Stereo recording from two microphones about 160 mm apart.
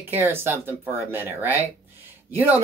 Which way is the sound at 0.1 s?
15° right (ahead or behind).